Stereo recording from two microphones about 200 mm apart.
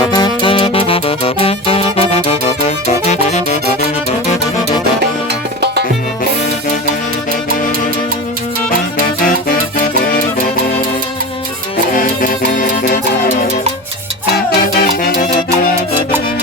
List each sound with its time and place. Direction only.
0.0 s music: 20° left (ahead or behind); by 3.8 s 35° left (ahead or behind)
9.0 s music: 45° left (ahead or behind)
11.9 s music: 45° left (ahead or behind)
14.3 s music: 50° left (ahead or behind)